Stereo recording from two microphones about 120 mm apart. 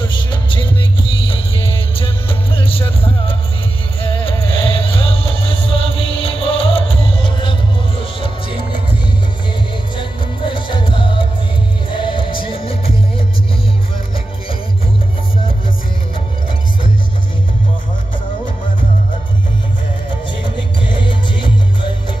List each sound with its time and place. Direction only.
0.0 s music: 40° left (ahead or behind)
2.0 s music: 50° left (ahead or behind)
9.9 s music: 45° left (ahead or behind)
20.4 s music: 45° left (ahead or behind)